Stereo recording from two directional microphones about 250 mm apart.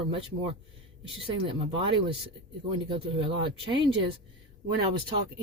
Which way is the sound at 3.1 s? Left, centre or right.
Centre.